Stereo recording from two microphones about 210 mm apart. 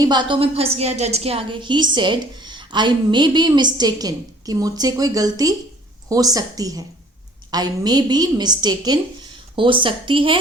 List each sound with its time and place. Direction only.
0.0 s a woman's voice: 20° right (ahead or behind)